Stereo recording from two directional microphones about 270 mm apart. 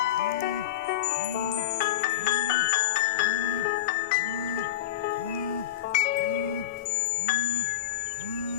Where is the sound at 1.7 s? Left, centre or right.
Left.